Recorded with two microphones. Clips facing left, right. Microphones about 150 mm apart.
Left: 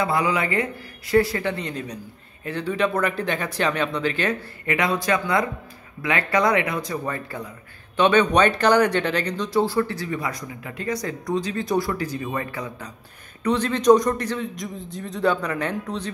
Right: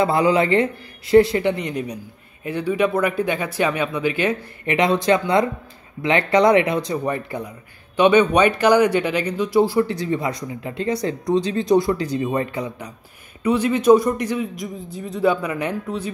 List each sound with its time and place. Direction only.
0.0 s a man's voice: 30° right (ahead or behind); by 4.7 s 15° right (ahead or behind)
4.7 s a man's voice: 25° right (ahead or behind)